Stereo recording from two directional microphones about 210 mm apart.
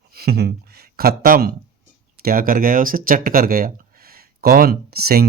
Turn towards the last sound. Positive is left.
turn(degrees=-45)  # may be behind; listen again after turning